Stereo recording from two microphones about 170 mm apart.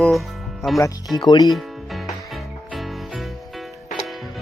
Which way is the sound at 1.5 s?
Centre (ahead or behind).